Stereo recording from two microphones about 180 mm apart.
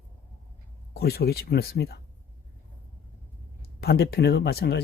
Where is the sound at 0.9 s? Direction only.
60° left (ahead or behind).